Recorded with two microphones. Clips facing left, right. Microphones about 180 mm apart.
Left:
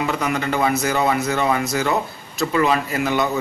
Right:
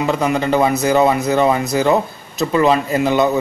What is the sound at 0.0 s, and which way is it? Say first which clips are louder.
Speech: right 5 dB; 25° right (ahead or behind).